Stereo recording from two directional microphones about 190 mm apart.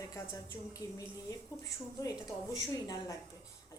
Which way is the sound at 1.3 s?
15° left (ahead or behind).